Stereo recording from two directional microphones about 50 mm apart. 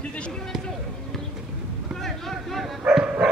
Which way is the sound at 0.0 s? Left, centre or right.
Left.